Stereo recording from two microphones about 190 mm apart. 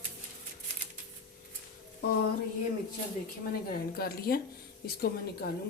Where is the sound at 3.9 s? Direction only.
55° left (ahead or behind).